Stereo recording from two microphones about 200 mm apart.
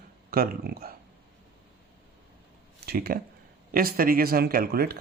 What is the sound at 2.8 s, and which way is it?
Speech, 50° right (ahead or behind).